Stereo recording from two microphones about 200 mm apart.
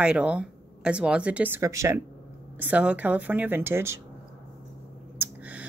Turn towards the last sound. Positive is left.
turn(degrees=-10)  # may be behind; listen again after turning